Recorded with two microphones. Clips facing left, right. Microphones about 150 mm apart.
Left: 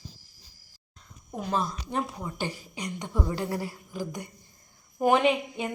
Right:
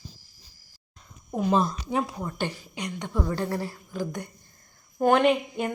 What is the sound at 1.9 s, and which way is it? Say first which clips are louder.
Speech: right 3 dB; 5° right (ahead or behind).